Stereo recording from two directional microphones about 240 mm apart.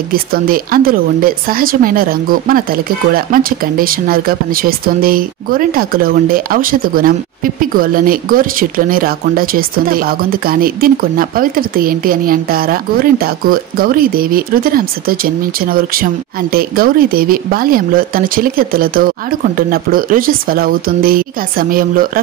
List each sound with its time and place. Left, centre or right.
0.1 s speech: right